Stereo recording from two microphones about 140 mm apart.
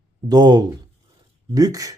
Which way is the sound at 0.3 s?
30° right (ahead or behind).